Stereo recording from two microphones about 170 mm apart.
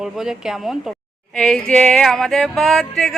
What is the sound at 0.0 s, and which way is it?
Speech, 5° right (ahead or behind).